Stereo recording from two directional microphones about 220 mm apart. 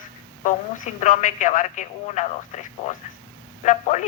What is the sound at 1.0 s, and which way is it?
A woman's voice, 35° left (ahead or behind).